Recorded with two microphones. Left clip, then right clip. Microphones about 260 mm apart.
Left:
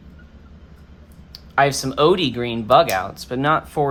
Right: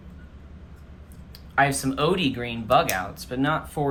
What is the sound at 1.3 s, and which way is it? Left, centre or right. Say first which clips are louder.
Speech: left 4 dB; centre.